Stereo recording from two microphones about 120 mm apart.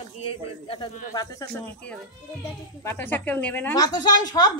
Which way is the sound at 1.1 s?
30° left (ahead or behind).